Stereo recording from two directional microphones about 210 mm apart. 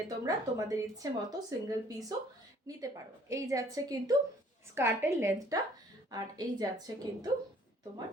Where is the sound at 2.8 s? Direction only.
15° right (ahead or behind).